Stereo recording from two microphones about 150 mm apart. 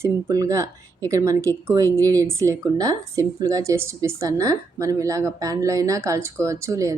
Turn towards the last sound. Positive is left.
turn(degrees=-20)  # may be behind; listen again after turning